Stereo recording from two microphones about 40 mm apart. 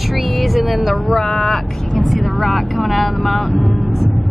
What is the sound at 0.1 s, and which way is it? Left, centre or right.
Music, centre.